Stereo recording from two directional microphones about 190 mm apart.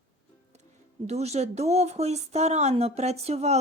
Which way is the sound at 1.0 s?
35° right (ahead or behind).